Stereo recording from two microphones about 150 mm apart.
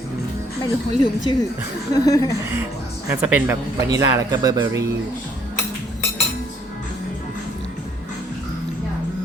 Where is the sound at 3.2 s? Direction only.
10° right (ahead or behind).